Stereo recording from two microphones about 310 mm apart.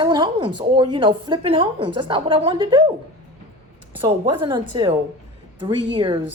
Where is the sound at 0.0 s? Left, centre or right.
Centre.